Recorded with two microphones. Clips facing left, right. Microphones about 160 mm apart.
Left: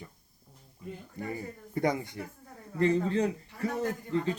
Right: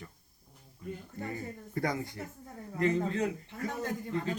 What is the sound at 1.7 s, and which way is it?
Speech, 20° left (ahead or behind).